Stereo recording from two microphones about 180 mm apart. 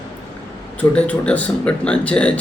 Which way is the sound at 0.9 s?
5° left (ahead or behind).